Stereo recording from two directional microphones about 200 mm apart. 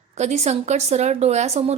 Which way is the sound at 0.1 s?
35° right (ahead or behind).